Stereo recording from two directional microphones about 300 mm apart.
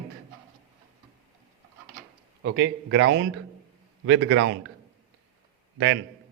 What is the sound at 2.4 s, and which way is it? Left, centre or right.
A man's voice, right.